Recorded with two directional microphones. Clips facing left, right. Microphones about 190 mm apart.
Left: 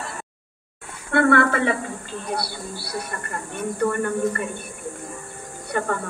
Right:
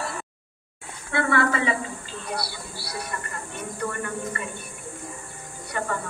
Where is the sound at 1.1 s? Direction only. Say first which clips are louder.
Left 5 dB; 55° left (ahead or behind).